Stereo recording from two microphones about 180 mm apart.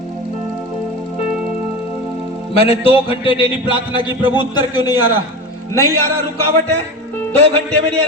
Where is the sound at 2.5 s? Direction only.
30° left (ahead or behind).